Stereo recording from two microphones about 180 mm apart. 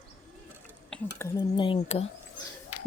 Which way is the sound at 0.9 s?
5° left (ahead or behind).